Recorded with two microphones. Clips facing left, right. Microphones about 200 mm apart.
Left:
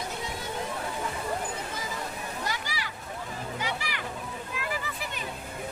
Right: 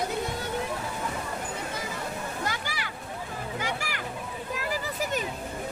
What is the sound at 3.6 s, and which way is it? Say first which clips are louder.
Music: right 1 dB; 45° right (ahead or behind).